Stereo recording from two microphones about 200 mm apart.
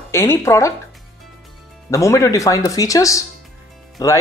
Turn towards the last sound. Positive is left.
turn(degrees=15)  # may be behind; listen again after turning